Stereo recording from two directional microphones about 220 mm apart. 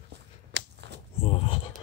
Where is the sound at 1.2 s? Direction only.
25° left (ahead or behind).